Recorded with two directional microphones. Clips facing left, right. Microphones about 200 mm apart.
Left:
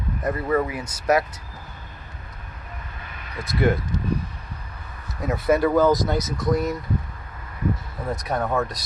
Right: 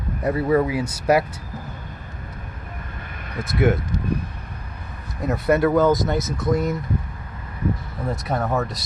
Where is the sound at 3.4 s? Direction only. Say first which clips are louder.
Right 2 dB; centre (ahead or behind).